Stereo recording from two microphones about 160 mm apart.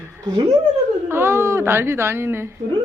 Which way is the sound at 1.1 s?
15° right (ahead or behind).